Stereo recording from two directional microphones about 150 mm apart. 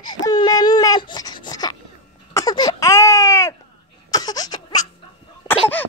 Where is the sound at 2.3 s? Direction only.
25° left (ahead or behind).